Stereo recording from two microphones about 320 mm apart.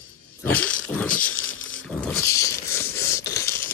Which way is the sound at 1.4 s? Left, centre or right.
Left.